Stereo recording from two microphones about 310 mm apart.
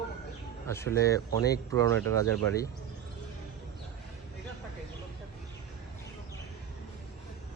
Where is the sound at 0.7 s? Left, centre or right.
Centre.